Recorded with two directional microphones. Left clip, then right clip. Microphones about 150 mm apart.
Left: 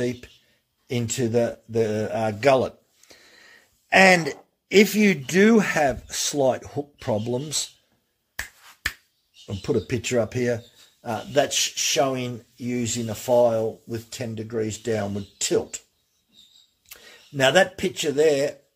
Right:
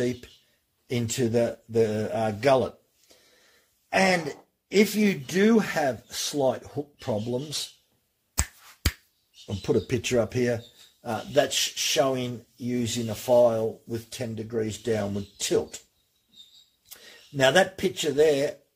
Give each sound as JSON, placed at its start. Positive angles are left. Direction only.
{"t": 0.0, "sound": "speech", "side_deg": 10}
{"t": 3.9, "sound": "speech", "side_deg": 60}
{"t": 9.5, "sound": "speech", "side_deg": 0}
{"t": 11.1, "sound": "speech", "side_deg": 15}
{"t": 16.9, "sound": "speech", "side_deg": 20}